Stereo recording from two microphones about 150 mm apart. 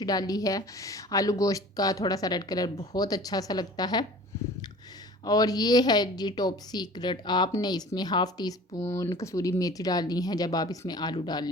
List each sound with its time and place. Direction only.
0.0 s a woman's voice: 25° left (ahead or behind)
5.2 s a woman's voice: 25° left (ahead or behind)